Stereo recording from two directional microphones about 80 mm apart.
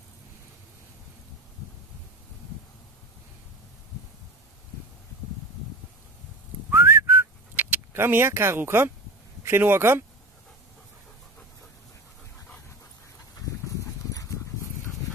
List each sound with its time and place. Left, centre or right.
6.7 s whistling: right
9.4 s speech: right
13.4 s dog: left